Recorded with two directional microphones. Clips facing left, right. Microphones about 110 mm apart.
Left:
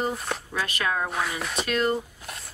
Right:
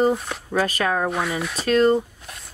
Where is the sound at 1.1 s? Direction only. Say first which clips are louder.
Right 5 dB; centre (ahead or behind).